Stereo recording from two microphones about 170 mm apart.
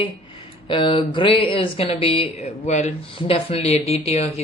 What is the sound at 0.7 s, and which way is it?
Speech, 30° left (ahead or behind).